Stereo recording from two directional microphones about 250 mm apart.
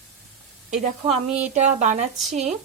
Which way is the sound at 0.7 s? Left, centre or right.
Right.